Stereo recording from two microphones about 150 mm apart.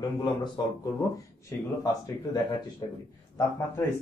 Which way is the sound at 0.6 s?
25° left (ahead or behind).